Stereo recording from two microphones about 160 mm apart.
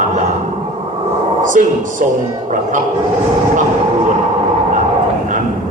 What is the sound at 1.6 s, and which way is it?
Speech, 55° right (ahead or behind).